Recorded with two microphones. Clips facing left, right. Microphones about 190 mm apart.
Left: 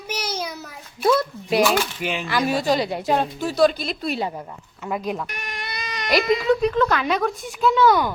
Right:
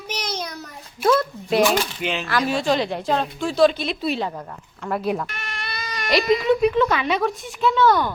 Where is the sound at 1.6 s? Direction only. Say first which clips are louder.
Even; 15° right (ahead or behind).